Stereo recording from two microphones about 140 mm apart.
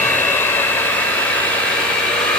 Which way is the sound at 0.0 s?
15° left (ahead or behind).